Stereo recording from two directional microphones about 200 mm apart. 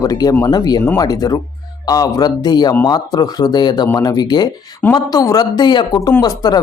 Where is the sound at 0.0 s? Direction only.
20° left (ahead or behind).